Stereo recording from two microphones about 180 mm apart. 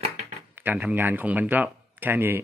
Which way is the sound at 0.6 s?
10° right (ahead or behind).